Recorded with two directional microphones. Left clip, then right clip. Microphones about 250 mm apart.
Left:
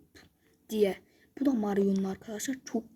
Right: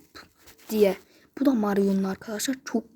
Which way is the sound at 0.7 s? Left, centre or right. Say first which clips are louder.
Right 6 dB; centre.